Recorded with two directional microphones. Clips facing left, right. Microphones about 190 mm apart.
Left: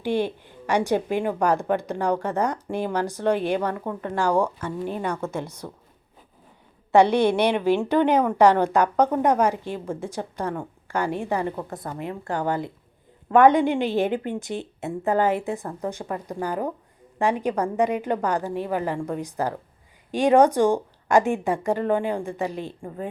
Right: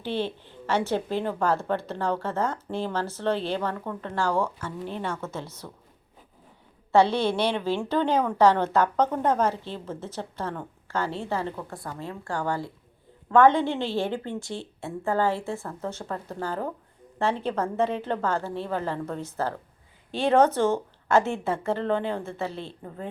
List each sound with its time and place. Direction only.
0.0 s speech: 15° left (ahead or behind)
6.9 s speech: 15° left (ahead or behind)